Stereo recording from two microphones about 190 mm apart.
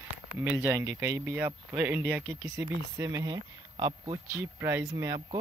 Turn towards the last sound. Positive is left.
turn(degrees=-15)  # may be behind; listen again after turning